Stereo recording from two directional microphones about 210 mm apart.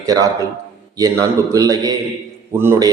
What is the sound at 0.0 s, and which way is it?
A man's voice, 15° right (ahead or behind).